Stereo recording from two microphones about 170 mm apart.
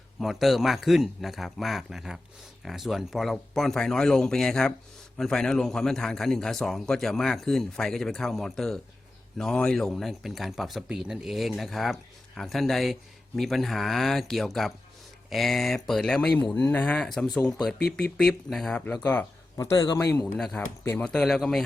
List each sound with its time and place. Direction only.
0.2 s speech: centre (ahead or behind); by 20.2 s 20° left (ahead or behind)
20.2 s speech: 5° left (ahead or behind)